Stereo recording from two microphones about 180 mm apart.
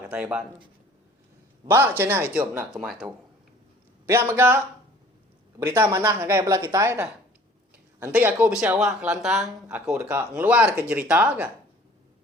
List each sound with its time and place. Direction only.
0.0 s speech: 5° right (ahead or behind)
1.7 s speech: 10° right (ahead or behind)
4.0 s speech: 15° right (ahead or behind)
5.6 s speech: 15° right (ahead or behind)